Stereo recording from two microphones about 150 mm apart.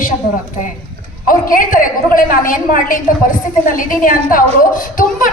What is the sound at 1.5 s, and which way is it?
A woman's voice, 65° left (ahead or behind).